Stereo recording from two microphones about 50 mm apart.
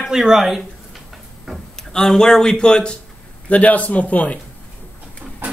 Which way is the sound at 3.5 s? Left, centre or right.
Left.